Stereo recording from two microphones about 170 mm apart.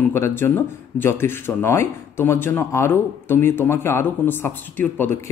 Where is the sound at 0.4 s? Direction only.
10° left (ahead or behind).